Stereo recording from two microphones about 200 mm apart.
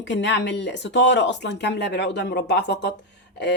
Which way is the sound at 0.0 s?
60° left (ahead or behind).